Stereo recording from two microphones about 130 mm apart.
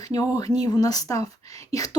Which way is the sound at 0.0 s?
30° left (ahead or behind).